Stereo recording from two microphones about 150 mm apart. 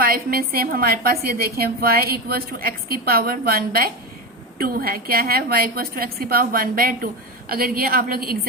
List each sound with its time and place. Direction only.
0.0 s a woman's voice: 75° right (ahead or behind)